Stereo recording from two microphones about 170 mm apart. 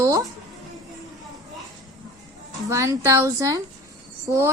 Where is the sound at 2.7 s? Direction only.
15° right (ahead or behind).